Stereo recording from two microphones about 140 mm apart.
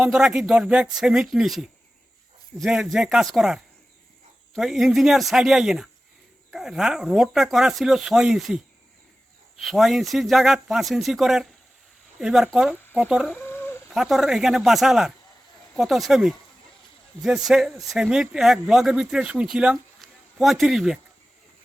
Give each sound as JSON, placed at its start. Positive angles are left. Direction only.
{"t": 0.0, "sound": "speech", "side_deg": -5}
{"t": 13.3, "sound": "chicken", "side_deg": 15}
{"t": 13.9, "sound": "speech", "side_deg": 0}